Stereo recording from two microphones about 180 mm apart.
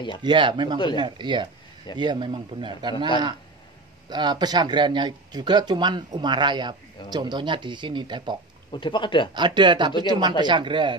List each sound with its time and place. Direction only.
0.2 s speech: 25° right (ahead or behind)
4.1 s speech: 25° right (ahead or behind)
8.7 s speech: 25° left (ahead or behind)
9.3 s speech: 25° right (ahead or behind)